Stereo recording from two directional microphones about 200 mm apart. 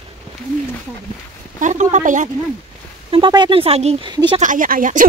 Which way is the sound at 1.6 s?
35° right (ahead or behind).